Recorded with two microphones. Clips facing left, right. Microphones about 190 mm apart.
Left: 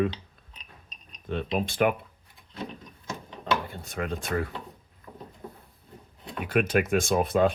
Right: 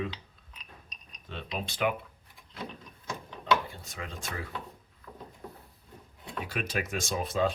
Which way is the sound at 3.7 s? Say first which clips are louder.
Left 9 dB; 60° left (ahead or behind).